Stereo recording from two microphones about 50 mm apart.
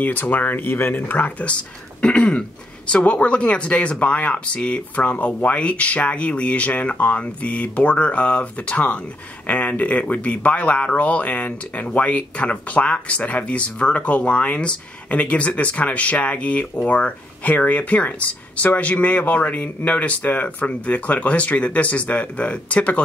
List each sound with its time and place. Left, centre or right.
0.0 s speech: left
1.4 s speech: left